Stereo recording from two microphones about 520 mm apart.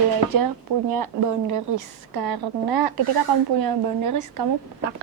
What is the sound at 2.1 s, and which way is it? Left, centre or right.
Speech, right.